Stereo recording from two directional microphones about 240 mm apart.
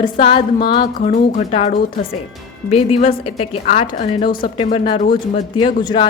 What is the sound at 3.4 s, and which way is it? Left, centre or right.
A woman's voice, left.